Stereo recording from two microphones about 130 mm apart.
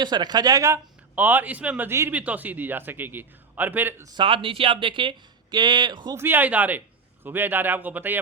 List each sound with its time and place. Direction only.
0.0 s a man's voice: 35° right (ahead or behind); by 4.0 s 15° right (ahead or behind)
4.0 s speech: 35° right (ahead or behind)
6.1 s a man's voice: 15° right (ahead or behind)